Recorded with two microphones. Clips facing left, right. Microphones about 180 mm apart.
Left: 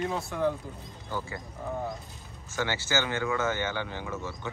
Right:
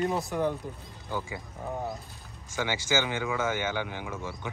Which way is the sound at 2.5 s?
15° right (ahead or behind).